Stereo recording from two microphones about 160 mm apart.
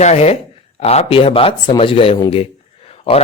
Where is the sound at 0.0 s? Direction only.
45° left (ahead or behind).